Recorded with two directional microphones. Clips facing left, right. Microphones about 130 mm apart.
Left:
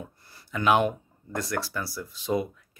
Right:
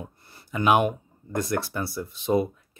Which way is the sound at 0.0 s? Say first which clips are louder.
Right 2 dB; 20° right (ahead or behind).